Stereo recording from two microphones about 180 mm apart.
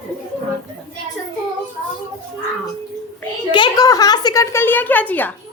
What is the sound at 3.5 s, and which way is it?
A woman's voice, 25° left (ahead or behind).